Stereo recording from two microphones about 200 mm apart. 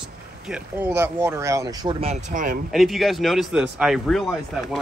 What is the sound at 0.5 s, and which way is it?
Speech, 5° right (ahead or behind).